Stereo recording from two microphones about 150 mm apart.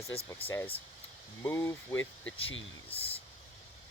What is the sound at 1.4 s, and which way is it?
Speech, 15° left (ahead or behind).